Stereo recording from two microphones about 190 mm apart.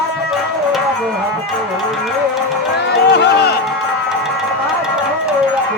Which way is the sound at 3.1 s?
65° left (ahead or behind).